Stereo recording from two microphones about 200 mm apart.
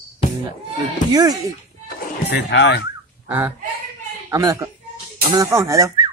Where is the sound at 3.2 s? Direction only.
10° right (ahead or behind).